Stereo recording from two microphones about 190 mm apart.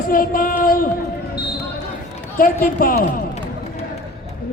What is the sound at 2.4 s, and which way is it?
Speech, 50° left (ahead or behind).